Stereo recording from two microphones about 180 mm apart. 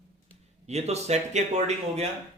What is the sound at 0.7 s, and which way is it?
A man's voice, 35° right (ahead or behind).